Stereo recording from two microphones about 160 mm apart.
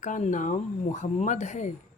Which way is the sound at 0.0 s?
50° left (ahead or behind).